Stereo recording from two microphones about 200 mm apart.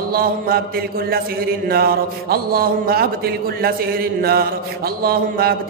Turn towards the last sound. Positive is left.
turn(degrees=-50)  # may be behind; listen again after turning